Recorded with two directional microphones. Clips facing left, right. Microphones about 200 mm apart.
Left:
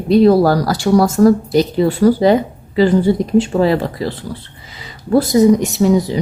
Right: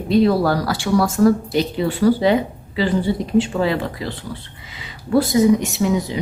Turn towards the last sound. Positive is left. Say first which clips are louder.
# left 6 dB
turn(degrees=35)  # may be behind; listen again after turning